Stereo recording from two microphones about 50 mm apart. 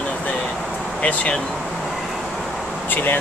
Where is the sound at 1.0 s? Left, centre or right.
Left.